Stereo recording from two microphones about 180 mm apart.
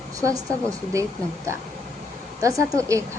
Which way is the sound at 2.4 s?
20° right (ahead or behind).